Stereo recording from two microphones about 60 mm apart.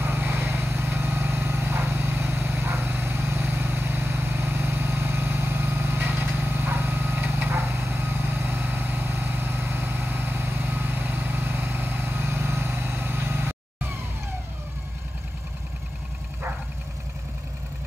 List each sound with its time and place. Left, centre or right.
0.0 s vehicle: right